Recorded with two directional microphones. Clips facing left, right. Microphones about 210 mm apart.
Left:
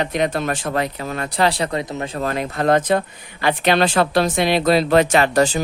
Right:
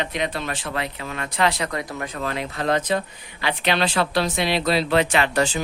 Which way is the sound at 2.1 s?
45° left (ahead or behind).